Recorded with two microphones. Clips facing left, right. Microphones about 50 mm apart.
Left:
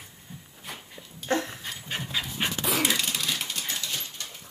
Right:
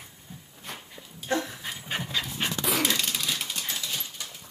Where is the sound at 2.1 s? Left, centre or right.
Centre.